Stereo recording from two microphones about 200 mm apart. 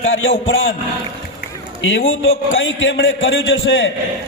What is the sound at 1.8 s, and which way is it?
A man's voice, 70° left (ahead or behind).